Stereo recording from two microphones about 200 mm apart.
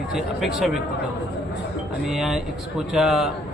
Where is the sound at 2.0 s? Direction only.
Centre (ahead or behind).